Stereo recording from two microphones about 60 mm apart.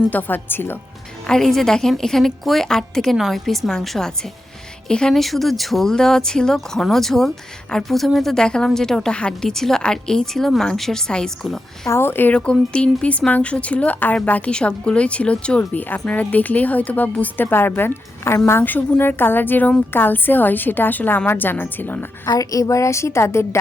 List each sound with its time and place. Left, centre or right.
0.1 s a woman's voice: left
1.3 s a woman's voice: centre
11.9 s a woman's voice: left
12.3 s a woman's voice: centre; by 18.6 s left
18.6 s a woman's voice: left
22.4 s a woman's voice: left